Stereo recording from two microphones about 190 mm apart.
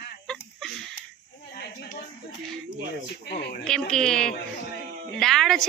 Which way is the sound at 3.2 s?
60° left (ahead or behind).